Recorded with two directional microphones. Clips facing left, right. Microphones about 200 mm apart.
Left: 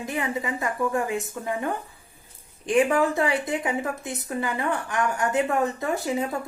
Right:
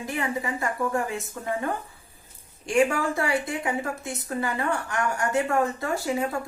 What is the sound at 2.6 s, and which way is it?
A woman's voice, 20° left (ahead or behind).